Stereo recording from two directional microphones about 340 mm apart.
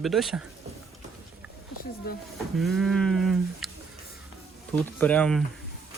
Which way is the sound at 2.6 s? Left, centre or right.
Centre.